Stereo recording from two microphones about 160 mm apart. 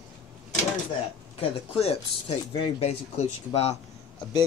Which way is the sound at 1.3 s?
35° left (ahead or behind).